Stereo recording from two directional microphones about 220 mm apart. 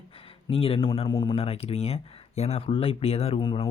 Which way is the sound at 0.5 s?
25° left (ahead or behind).